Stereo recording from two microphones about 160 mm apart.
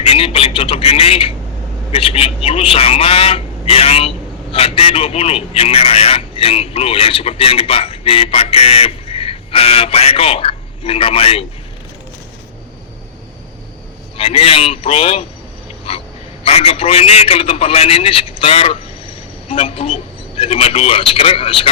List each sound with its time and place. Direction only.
0.0 s a man's voice: 35° left (ahead or behind)
14.2 s a man's voice: 35° left (ahead or behind)
15.9 s wheeze: 35° left (ahead or behind)
16.4 s a man's voice: 40° left (ahead or behind)